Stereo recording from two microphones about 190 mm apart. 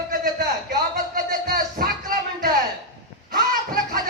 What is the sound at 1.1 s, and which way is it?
Music, 50° right (ahead or behind).